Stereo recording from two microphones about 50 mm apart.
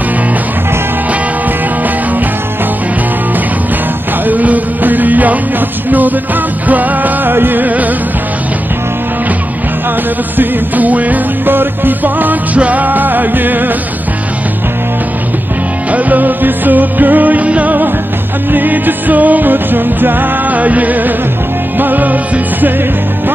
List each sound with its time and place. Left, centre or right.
4.3 s music: right
10.3 s music: right
15.9 s music: right